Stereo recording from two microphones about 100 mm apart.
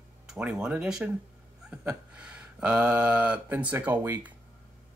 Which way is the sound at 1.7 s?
10° right (ahead or behind).